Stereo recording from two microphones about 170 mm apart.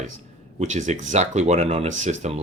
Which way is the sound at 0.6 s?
45° right (ahead or behind).